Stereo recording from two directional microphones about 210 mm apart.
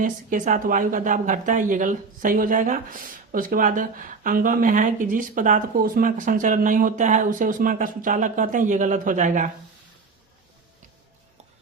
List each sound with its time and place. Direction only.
0.0 s speech: 40° right (ahead or behind)